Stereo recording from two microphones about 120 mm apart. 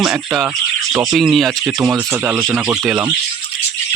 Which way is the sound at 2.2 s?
20° right (ahead or behind).